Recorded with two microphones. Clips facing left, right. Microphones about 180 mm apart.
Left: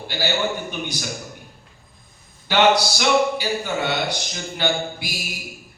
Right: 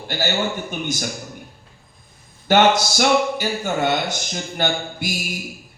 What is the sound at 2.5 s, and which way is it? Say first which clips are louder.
Speech: right 2 dB; 45° right (ahead or behind).